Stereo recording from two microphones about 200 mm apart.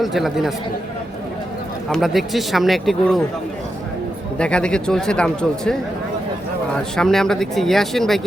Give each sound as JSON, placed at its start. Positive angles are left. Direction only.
{"t": 0.0, "sound": "speech", "side_deg": 0}
{"t": 1.9, "sound": "speech", "side_deg": 0}
{"t": 4.4, "sound": "speech", "side_deg": 5}
{"t": 6.9, "sound": "speech", "side_deg": 0}